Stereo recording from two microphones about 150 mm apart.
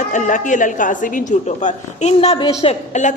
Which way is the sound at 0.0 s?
55° left (ahead or behind).